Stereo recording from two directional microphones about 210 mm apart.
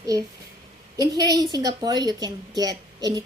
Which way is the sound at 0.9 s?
20° right (ahead or behind).